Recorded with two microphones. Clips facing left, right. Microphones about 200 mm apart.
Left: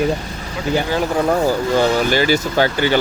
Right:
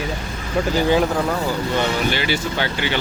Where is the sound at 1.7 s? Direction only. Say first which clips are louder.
Left 5 dB; 40° left (ahead or behind).